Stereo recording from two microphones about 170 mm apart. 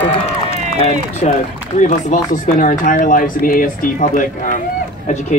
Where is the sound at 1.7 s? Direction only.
50° left (ahead or behind).